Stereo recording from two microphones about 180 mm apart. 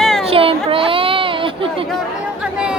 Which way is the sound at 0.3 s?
30° right (ahead or behind).